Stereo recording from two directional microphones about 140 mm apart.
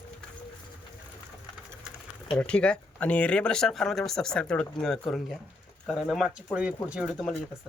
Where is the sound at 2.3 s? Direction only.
10° left (ahead or behind); by 6.7 s 5° right (ahead or behind).